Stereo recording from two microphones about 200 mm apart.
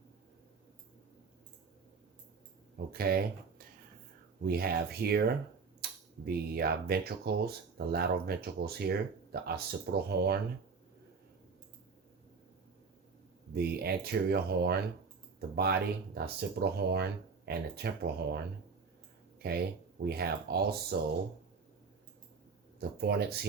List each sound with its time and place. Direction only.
2.9 s speech: 50° right (ahead or behind)
4.4 s speech: 50° right (ahead or behind)
5.8 s a sound: 50° right (ahead or behind)
6.2 s speech: 50° right (ahead or behind)
13.5 s speech: 50° right (ahead or behind)
20.1 s speech: 50° right (ahead or behind)
22.8 s speech: 50° right (ahead or behind)